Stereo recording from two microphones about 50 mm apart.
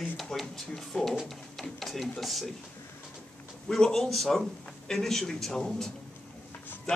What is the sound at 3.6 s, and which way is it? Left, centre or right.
A man's voice, centre.